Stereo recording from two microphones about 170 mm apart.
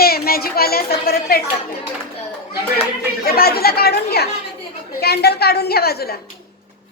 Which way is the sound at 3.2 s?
60° left (ahead or behind).